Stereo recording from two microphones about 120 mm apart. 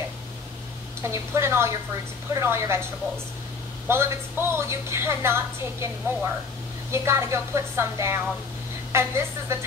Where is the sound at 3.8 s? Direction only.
20° right (ahead or behind).